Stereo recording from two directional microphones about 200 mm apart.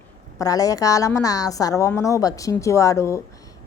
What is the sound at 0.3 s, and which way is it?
A woman's voice, 15° left (ahead or behind).